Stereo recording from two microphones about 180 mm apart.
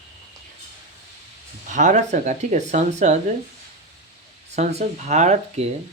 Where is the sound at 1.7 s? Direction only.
45° right (ahead or behind).